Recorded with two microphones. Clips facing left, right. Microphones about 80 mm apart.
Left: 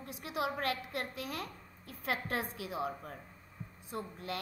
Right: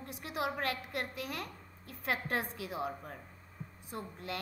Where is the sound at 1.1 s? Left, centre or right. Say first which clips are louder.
Even; left.